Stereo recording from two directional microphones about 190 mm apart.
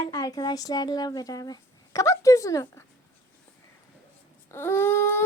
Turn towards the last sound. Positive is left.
turn(degrees=10)  # may be behind; listen again after turning